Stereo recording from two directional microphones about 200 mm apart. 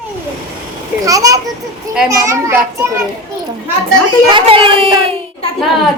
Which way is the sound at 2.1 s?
15° right (ahead or behind).